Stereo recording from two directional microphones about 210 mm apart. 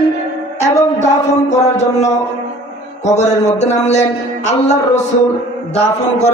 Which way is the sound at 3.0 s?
35° left (ahead or behind).